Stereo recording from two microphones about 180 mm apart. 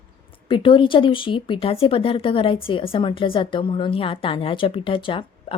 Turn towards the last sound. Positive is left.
turn(degrees=30)  # may be behind; listen again after turning